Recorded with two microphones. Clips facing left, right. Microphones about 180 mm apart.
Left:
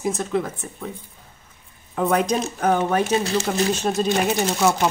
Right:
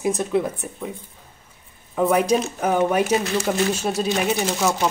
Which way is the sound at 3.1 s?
30° left (ahead or behind).